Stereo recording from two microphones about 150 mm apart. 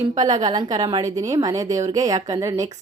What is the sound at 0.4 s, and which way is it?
A woman's voice, 30° right (ahead or behind).